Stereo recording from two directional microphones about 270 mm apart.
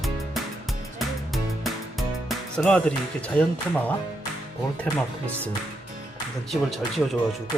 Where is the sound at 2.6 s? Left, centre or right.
Centre.